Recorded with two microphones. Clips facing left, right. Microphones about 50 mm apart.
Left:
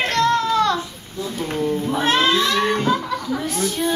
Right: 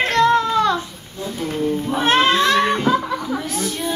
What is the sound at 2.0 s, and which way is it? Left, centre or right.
Speech, right.